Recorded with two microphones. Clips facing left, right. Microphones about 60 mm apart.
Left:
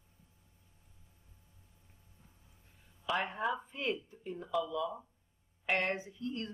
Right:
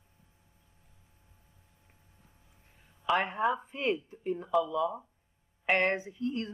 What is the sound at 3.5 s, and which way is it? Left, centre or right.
Speech, right.